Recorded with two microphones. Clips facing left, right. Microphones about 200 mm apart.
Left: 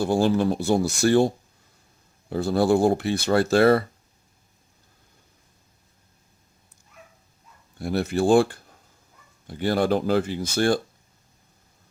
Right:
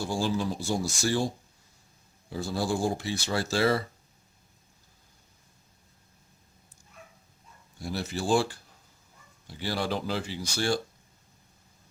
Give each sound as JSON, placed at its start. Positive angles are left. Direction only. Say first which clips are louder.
{"t": 0.0, "sound": "speech", "louder": "left 8 dB", "side_deg": 60}
{"t": 2.3, "sound": "speech", "louder": "left 9 dB", "side_deg": 60}
{"t": 7.8, "sound": "speech", "louder": "left 9 dB", "side_deg": 60}